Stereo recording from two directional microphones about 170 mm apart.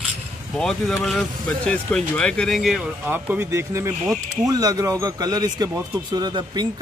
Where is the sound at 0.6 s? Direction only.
5° left (ahead or behind).